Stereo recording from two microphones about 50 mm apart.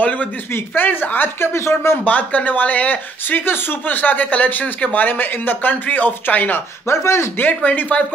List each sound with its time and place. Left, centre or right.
0.0 s speech: left
1.4 s speech: left
2.0 s speech: left
6.9 s speech: left
7.3 s speech: left